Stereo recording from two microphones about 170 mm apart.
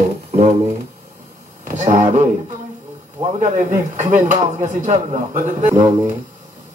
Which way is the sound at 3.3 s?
45° right (ahead or behind).